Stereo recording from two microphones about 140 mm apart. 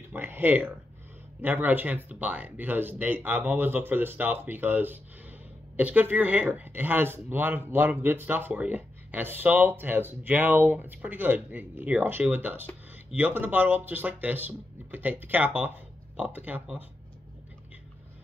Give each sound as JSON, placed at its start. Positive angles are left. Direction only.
{"t": 0.1, "sound": "speech", "side_deg": -15}